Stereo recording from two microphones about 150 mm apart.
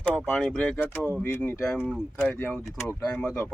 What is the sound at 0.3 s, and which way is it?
Speech, 5° left (ahead or behind).